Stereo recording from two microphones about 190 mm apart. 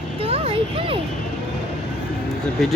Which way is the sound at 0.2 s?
30° right (ahead or behind).